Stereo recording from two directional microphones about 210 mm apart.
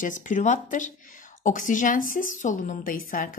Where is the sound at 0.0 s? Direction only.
35° left (ahead or behind).